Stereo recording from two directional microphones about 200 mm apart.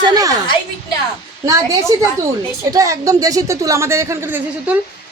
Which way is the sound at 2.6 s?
15° right (ahead or behind).